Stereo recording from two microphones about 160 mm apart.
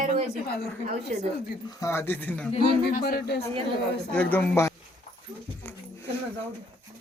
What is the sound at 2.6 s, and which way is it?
Speech, 75° left (ahead or behind).